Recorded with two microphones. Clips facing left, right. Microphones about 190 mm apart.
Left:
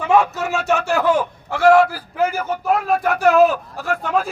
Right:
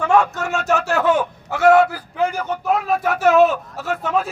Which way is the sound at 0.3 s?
Centre (ahead or behind).